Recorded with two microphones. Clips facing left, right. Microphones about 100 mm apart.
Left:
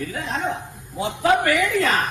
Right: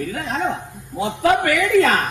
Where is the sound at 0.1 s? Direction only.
45° right (ahead or behind).